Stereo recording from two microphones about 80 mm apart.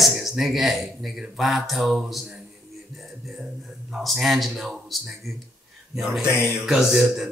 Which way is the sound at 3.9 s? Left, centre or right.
Centre.